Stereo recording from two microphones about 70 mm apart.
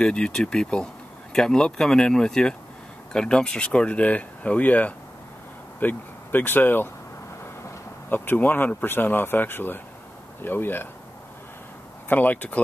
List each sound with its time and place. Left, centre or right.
0.0 s speech: centre; by 6.9 s left
8.1 s speech: left
12.1 s speech: left